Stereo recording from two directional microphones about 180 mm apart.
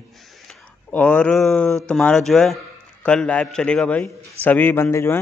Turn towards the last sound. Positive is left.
turn(degrees=15)  # may be behind; listen again after turning